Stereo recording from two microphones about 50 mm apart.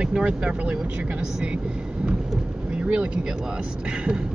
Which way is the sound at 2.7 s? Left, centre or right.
Right.